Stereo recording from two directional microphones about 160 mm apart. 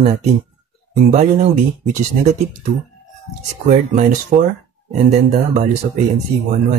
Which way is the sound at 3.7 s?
45° right (ahead or behind).